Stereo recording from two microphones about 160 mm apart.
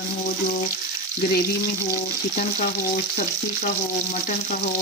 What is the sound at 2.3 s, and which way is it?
Speech, 60° left (ahead or behind).